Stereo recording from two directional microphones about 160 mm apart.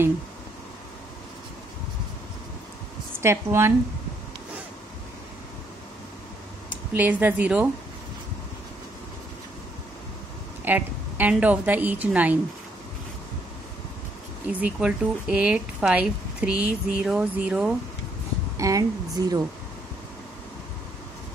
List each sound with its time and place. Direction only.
3.2 s speech: 15° right (ahead or behind)
6.9 s speech: 10° right (ahead or behind)
10.6 s a woman's voice: 10° right (ahead or behind)
14.5 s speech: 10° right (ahead or behind)
18.6 s speech: 20° right (ahead or behind)